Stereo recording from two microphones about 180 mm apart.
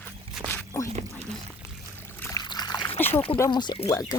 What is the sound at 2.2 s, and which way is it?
Trickle, 20° left (ahead or behind).